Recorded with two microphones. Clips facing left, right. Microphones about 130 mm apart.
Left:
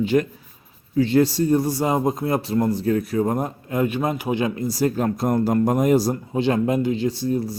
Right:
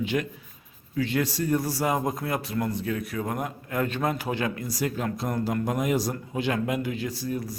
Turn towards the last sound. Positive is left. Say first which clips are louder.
# left 8 dB
turn(degrees=30)  # may be behind; listen again after turning